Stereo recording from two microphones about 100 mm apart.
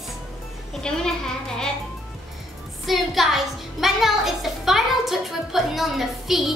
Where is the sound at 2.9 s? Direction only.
Centre (ahead or behind).